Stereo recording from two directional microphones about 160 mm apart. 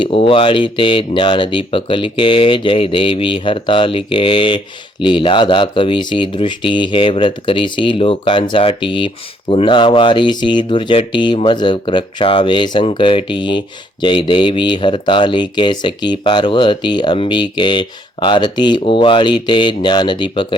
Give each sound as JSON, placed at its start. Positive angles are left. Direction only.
{"t": 0.0, "sound": "speech", "side_deg": 35}